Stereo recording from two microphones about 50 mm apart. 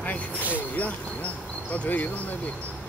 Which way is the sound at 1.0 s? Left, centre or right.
Left.